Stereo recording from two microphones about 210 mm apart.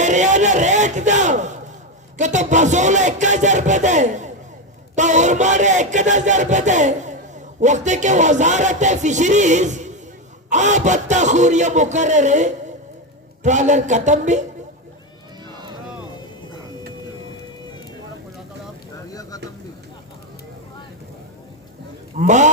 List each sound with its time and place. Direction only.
0.0 s speech: 35° right (ahead or behind)
2.1 s a sound: 35° right (ahead or behind)
22.1 s speech: 35° right (ahead or behind)